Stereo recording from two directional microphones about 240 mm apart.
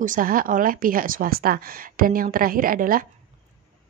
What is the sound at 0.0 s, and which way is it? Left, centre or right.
Speech, right.